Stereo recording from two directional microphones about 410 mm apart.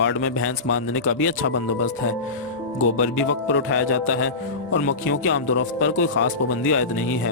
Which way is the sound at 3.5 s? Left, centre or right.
Left.